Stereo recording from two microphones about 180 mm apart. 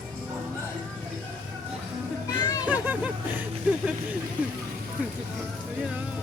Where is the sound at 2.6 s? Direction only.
10° right (ahead or behind).